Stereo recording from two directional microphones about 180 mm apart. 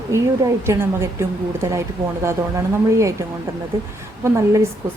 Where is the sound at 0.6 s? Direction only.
15° right (ahead or behind).